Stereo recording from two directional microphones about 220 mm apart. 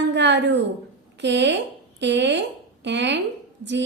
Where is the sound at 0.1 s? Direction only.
50° right (ahead or behind).